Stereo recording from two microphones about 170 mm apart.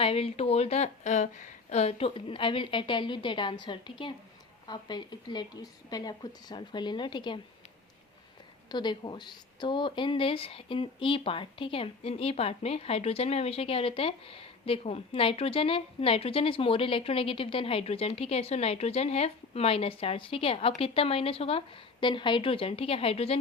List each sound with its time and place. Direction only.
0.0 s speech: 35° left (ahead or behind)
8.7 s speech: 25° left (ahead or behind)